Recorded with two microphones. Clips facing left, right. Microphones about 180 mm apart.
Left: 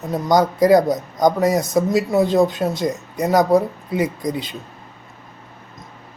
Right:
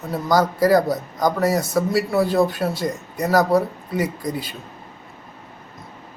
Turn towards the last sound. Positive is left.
turn(degrees=20)  # may be behind; listen again after turning